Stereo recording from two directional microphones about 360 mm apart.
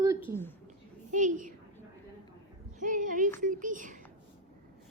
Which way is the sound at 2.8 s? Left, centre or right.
Right.